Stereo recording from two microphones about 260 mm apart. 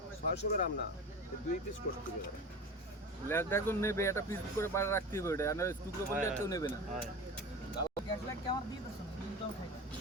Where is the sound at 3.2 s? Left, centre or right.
Centre.